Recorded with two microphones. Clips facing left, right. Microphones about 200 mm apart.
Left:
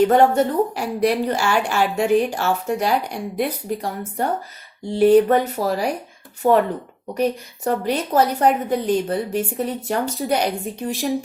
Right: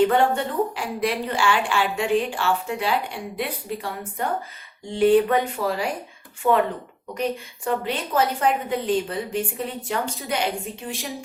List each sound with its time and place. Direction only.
0.1 s a woman's voice: 40° left (ahead or behind)
10.9 s speech: centre (ahead or behind)